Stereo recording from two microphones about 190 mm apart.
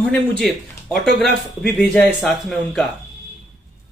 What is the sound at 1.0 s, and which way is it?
Speech, 55° right (ahead or behind).